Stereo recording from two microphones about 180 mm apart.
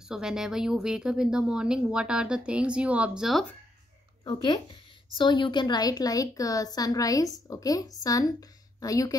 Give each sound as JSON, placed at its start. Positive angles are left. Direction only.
{"t": 0.1, "sound": "a woman's voice", "side_deg": -5}
{"t": 4.2, "sound": "a woman's voice", "side_deg": 25}